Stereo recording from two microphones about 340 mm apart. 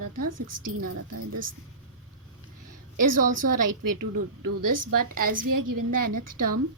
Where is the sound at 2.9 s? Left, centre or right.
Right.